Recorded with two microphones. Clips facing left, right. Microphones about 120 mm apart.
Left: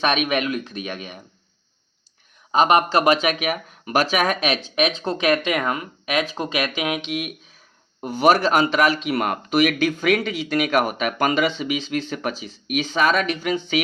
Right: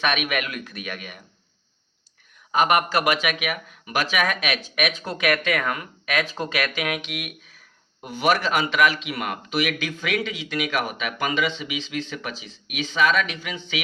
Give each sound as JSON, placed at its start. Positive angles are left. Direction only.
{"t": 0.0, "sound": "speech", "side_deg": 30}
{"t": 2.5, "sound": "speech", "side_deg": 25}
{"t": 8.0, "sound": "speech", "side_deg": 40}